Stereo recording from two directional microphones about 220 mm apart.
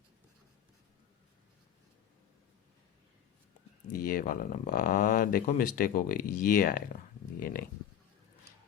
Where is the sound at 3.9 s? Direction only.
40° left (ahead or behind).